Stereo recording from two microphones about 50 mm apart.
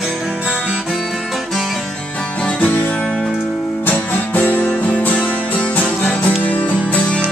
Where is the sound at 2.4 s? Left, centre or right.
Left.